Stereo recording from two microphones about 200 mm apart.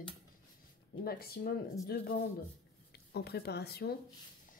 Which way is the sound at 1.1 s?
50° left (ahead or behind).